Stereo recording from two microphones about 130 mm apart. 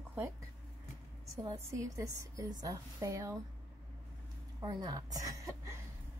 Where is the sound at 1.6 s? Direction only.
25° right (ahead or behind).